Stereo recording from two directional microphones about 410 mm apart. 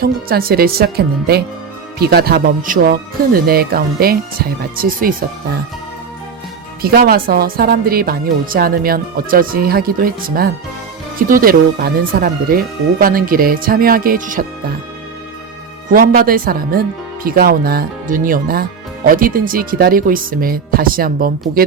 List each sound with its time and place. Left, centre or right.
0.0 s a woman's voice: right
6.8 s a woman's voice: right
15.9 s a woman's voice: right